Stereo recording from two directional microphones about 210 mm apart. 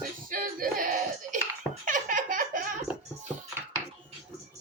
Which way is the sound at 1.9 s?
40° right (ahead or behind).